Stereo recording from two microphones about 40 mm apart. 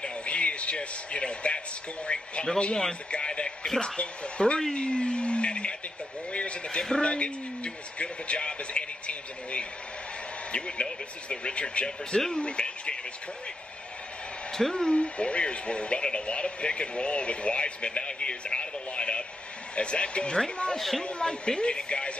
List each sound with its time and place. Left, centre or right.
0.0 s a sound: left
2.1 s speech: left
14.5 s speech: centre
20.7 s speech: centre
21.0 s speech: left